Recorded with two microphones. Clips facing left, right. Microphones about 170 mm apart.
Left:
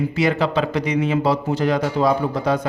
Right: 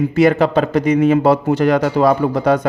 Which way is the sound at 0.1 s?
50° right (ahead or behind).